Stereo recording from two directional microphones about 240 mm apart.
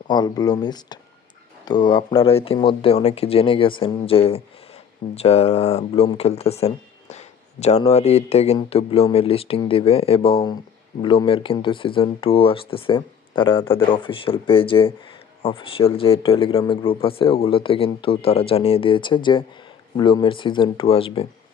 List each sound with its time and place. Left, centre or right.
0.1 s speech: centre